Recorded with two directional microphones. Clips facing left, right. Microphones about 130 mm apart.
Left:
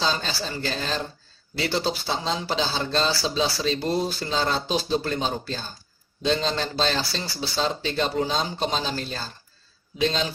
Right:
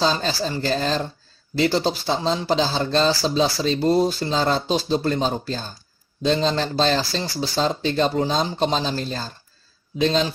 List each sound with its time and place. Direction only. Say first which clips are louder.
0.0 s speech: right 5 dB; 40° right (ahead or behind)